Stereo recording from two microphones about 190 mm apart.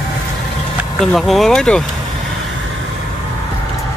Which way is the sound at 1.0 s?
Centre (ahead or behind).